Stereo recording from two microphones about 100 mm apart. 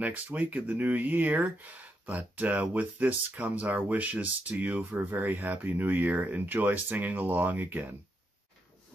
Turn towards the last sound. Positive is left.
turn(degrees=-20)  # may be behind; listen again after turning